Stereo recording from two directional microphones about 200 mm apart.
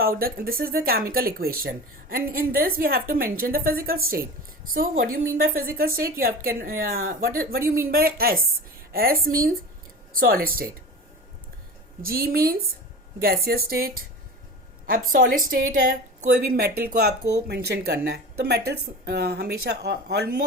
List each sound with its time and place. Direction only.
0.0 s speech: 50° right (ahead or behind)
12.0 s speech: 50° right (ahead or behind)
15.1 s speech: 45° right (ahead or behind)